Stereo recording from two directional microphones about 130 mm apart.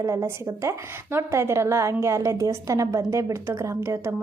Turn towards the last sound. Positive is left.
turn(degrees=-20)  # may be behind; listen again after turning